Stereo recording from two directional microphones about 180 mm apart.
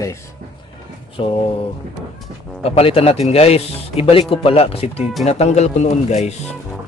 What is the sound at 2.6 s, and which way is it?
Speech, 35° left (ahead or behind).